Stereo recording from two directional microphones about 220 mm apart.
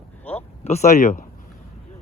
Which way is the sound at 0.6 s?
30° left (ahead or behind).